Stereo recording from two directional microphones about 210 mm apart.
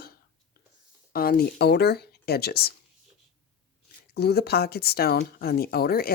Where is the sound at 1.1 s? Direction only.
45° left (ahead or behind).